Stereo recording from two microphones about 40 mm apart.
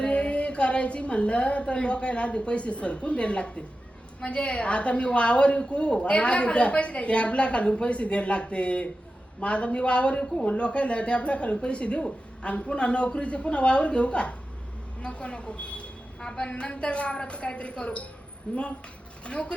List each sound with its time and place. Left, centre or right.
0.0 s a woman's voice: left
16.2 s a woman's voice: centre
16.5 s a woman's voice: left